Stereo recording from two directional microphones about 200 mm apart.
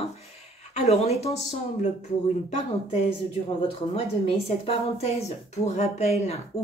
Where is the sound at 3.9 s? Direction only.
30° left (ahead or behind).